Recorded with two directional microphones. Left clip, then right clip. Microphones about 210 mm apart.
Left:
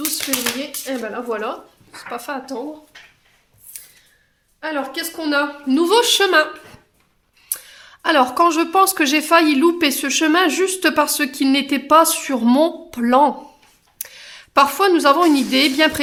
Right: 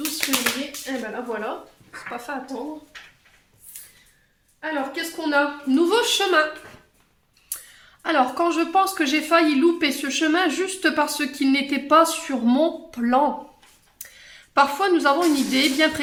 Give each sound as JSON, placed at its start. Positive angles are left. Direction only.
{"t": 0.0, "sound": "speech", "side_deg": 40}
{"t": 4.6, "sound": "speech", "side_deg": 45}
{"t": 7.5, "sound": "speech", "side_deg": 40}